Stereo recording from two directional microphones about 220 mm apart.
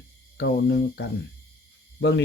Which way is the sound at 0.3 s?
50° left (ahead or behind).